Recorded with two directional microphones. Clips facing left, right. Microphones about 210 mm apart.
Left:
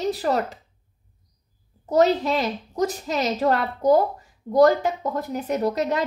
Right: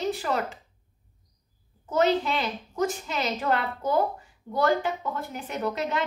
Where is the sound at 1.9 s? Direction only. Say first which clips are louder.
Left 4 dB; 40° left (ahead or behind).